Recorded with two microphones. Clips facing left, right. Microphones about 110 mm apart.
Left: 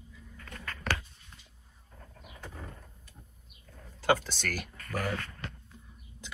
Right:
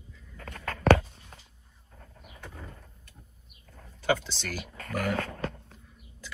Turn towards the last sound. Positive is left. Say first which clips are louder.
# right 9 dB
turn(degrees=-55)  # may be behind; listen again after turning